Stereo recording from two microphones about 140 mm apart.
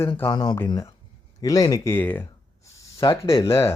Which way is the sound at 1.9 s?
15° left (ahead or behind).